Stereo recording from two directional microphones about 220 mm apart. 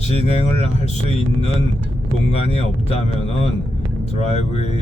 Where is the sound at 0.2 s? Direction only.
30° left (ahead or behind).